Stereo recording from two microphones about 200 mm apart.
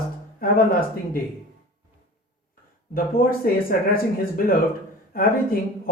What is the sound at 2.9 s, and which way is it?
Speech, 45° left (ahead or behind).